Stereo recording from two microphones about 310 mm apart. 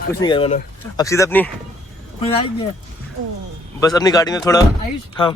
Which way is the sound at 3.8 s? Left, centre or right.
Centre.